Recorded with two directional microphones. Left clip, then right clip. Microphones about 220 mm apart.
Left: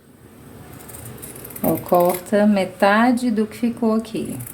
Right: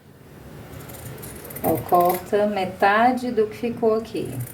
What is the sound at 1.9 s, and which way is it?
A woman's voice, 40° left (ahead or behind).